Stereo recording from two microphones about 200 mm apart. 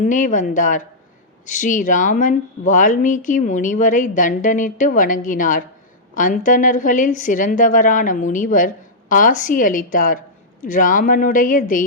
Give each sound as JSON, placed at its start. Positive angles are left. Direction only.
{"t": 0.0, "sound": "a woman's voice", "side_deg": 40}